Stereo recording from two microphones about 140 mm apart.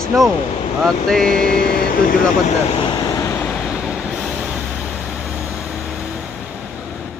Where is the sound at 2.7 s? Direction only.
30° left (ahead or behind).